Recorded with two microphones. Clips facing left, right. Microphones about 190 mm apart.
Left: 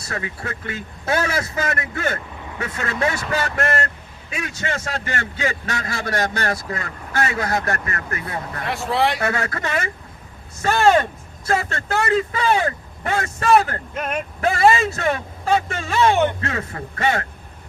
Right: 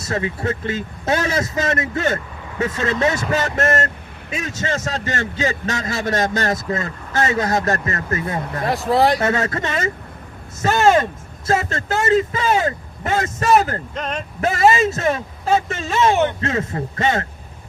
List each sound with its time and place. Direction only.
0.1 s a man's voice: 25° right (ahead or behind)
9.2 s a man's voice: 25° right (ahead or behind)
13.9 s speech: 10° left (ahead or behind)
14.8 s a man's voice: 25° right (ahead or behind)